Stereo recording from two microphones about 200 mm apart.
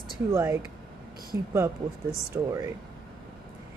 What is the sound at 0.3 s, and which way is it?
Speech, 15° right (ahead or behind).